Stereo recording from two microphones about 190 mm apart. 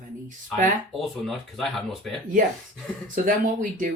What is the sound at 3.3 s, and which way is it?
Speech, 45° right (ahead or behind).